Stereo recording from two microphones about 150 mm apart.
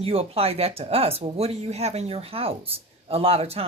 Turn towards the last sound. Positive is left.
turn(degrees=-40)  # may be behind; listen again after turning